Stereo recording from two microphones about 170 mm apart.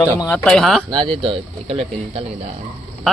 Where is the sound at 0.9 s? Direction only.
30° right (ahead or behind).